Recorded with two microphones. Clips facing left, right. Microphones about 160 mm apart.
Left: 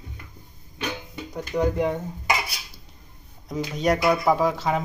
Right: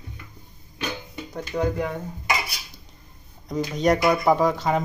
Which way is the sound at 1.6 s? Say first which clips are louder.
Left 2 dB; 20° left (ahead or behind).